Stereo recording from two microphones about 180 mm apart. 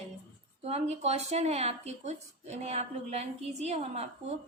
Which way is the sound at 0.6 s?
35° right (ahead or behind).